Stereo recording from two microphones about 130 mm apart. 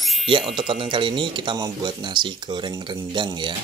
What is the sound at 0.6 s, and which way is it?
Speech, 40° right (ahead or behind).